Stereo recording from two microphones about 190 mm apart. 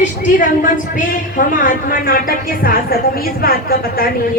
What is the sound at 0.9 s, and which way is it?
A woman's voice, 45° left (ahead or behind).